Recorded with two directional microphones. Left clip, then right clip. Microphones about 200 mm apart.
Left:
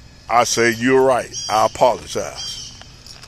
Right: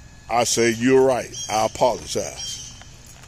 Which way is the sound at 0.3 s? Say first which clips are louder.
Left 4 dB; 10° right (ahead or behind).